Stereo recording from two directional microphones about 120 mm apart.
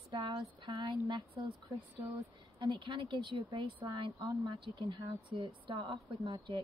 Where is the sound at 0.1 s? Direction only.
40° right (ahead or behind).